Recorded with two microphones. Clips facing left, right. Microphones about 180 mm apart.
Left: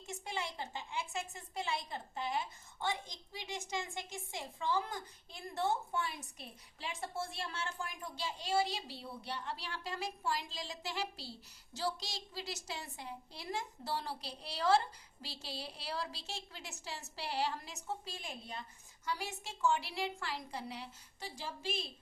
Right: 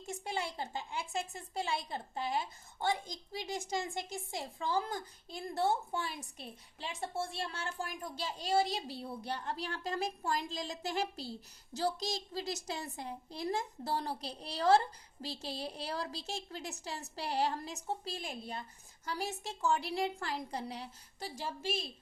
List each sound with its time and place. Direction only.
0.1 s a woman's voice: 35° right (ahead or behind)